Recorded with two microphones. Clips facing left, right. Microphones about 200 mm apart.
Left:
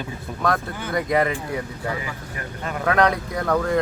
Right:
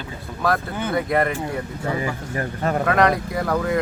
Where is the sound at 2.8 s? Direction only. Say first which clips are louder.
Left 1 dB; centre (ahead or behind).